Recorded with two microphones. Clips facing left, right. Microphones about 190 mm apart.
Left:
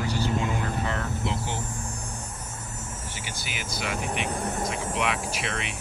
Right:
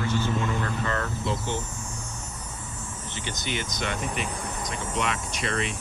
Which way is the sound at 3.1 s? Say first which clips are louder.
Right 9 dB; 10° left (ahead or behind).